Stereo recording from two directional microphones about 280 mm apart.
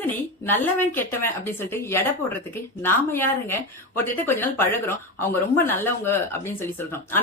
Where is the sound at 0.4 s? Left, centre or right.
Centre.